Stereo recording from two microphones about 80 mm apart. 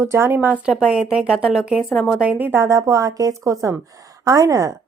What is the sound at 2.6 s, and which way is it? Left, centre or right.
A woman's voice, right.